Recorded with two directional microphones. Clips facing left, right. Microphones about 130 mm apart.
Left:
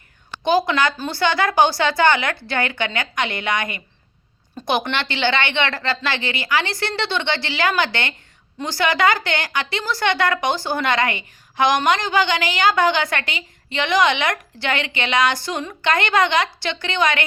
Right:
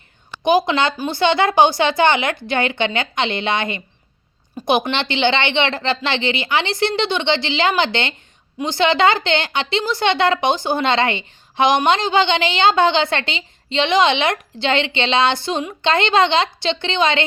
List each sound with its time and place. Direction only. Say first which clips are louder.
0.4 s a woman's voice: right 2 dB; 20° right (ahead or behind)